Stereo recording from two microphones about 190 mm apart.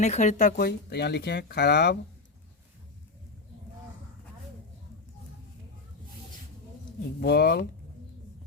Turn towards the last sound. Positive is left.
turn(degrees=60)  # may be behind; listen again after turning